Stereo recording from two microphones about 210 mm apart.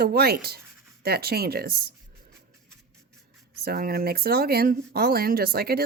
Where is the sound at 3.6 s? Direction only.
45° right (ahead or behind).